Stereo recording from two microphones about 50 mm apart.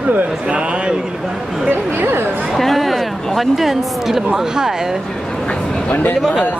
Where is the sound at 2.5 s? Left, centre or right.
Centre.